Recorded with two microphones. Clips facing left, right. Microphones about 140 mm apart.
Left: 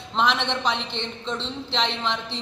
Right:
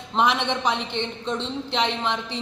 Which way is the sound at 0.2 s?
10° right (ahead or behind).